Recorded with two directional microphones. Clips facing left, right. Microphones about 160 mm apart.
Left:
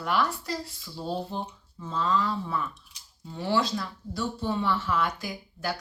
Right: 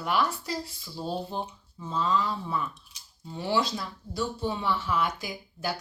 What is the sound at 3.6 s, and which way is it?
Speech, centre (ahead or behind).